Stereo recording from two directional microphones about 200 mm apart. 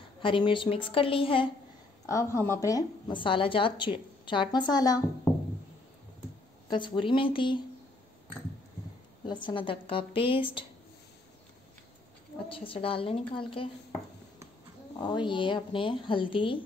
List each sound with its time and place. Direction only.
0.2 s a woman's voice: 25° left (ahead or behind)
2.0 s a woman's voice: 15° left (ahead or behind)
6.7 s a woman's voice: 25° left (ahead or behind)
9.2 s a woman's voice: 25° left (ahead or behind)
12.4 s a woman's voice: 25° left (ahead or behind)
15.0 s a woman's voice: 20° left (ahead or behind)